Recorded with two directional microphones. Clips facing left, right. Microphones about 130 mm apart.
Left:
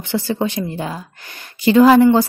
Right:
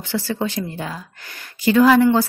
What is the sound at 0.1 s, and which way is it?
A woman's voice, 20° left (ahead or behind).